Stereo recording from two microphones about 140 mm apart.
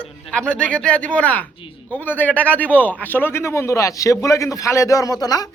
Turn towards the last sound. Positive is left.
turn(degrees=25)  # may be behind; listen again after turning